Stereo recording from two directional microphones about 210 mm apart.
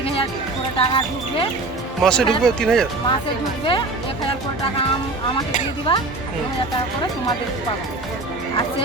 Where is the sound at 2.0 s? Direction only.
5° left (ahead or behind).